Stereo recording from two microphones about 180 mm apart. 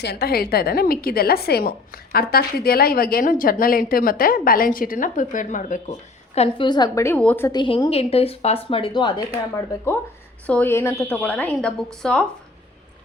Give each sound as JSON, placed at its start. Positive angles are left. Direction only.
{"t": 0.0, "sound": "a woman's voice", "side_deg": 60}
{"t": 6.3, "sound": "a woman's voice", "side_deg": 30}
{"t": 7.5, "sound": "a woman's voice", "side_deg": 25}
{"t": 10.4, "sound": "a woman's voice", "side_deg": 10}